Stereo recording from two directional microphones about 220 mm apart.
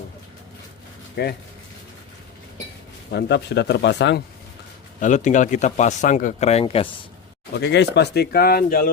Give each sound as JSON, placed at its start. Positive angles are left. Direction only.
{"t": 1.1, "sound": "speech", "side_deg": 45}
{"t": 3.1, "sound": "speech", "side_deg": 50}
{"t": 4.9, "sound": "speech", "side_deg": 35}
{"t": 7.5, "sound": "speech", "side_deg": 50}